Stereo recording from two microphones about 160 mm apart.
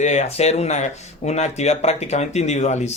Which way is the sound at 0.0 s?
45° left (ahead or behind).